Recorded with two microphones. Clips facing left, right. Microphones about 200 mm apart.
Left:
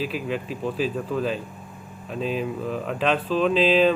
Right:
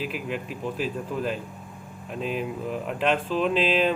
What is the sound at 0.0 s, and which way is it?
Speech, 15° right (ahead or behind).